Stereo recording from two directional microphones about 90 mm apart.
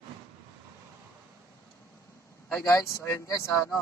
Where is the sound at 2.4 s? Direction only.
15° left (ahead or behind).